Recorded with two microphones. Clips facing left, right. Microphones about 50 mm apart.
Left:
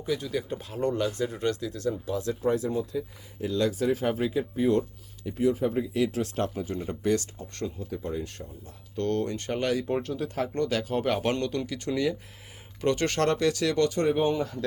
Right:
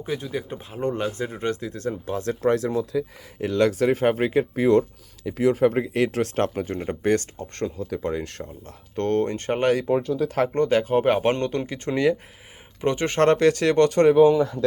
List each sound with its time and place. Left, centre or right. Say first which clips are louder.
0.0 s speech: right 1 dB; right
2.4 s speech: right 6 dB; right
3.4 s speech: right 6 dB; right
7.8 s speech: right 6 dB; right
9.0 s speech: right 5 dB; right
12.8 s speech: right 3 dB; right
13.2 s speech: right 9 dB; right